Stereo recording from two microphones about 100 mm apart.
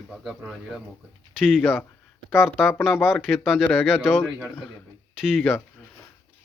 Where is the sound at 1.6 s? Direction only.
20° left (ahead or behind).